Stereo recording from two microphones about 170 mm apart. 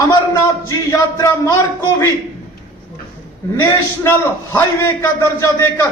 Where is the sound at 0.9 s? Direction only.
20° left (ahead or behind).